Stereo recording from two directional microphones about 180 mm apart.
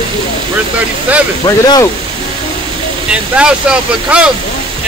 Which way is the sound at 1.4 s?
20° left (ahead or behind).